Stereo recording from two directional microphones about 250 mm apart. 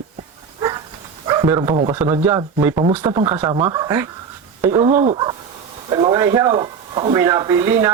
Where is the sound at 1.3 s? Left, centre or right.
Centre.